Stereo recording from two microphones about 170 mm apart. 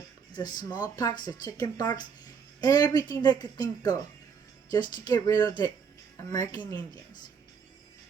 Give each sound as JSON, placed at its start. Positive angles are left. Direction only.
{"t": 0.3, "sound": "speech", "side_deg": 25}